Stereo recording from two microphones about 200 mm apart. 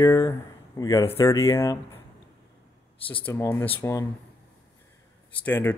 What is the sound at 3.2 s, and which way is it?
Speech, 10° left (ahead or behind).